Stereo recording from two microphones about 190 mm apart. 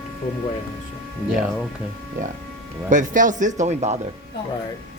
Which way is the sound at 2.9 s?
45° right (ahead or behind).